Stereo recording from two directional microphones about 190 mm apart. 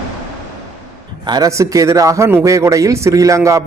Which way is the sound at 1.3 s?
20° right (ahead or behind).